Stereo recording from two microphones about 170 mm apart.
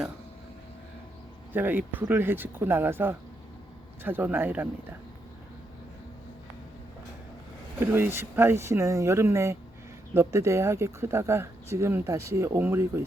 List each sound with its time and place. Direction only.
1.5 s speech: 10° right (ahead or behind)
7.8 s speech: 15° right (ahead or behind)